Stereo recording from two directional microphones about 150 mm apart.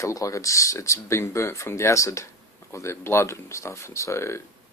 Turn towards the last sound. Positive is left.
turn(degrees=20)  # may be behind; listen again after turning